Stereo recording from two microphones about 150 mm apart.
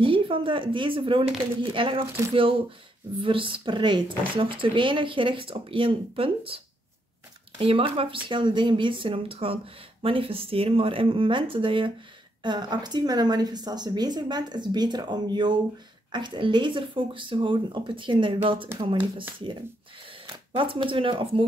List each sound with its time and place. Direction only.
0.0 s speech: 35° right (ahead or behind)
3.2 s a woman's voice: 35° right (ahead or behind)
20.5 s speech: 35° right (ahead or behind)